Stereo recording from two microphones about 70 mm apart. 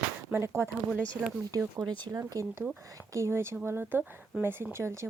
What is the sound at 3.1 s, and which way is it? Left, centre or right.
Speech, right.